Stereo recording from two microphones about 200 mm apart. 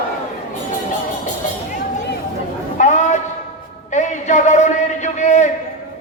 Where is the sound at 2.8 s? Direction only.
35° left (ahead or behind).